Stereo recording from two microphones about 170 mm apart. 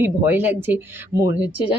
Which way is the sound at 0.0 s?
10° right (ahead or behind).